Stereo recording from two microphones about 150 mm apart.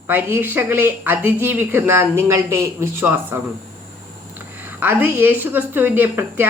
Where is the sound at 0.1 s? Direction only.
15° right (ahead or behind).